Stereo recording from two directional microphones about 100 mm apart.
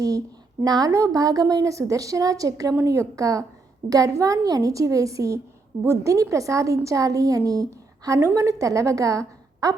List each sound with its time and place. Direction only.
0.6 s a woman's voice: 40° right (ahead or behind)